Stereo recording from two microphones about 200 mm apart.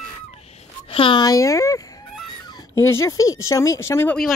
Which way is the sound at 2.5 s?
15° left (ahead or behind).